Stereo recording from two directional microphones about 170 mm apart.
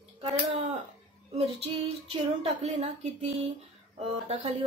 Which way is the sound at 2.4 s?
40° right (ahead or behind).